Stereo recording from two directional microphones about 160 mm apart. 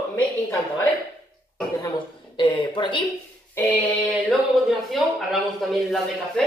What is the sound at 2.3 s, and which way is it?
Speech, 30° left (ahead or behind).